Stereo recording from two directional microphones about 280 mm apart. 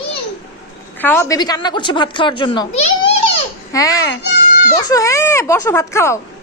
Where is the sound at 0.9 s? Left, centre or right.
Centre.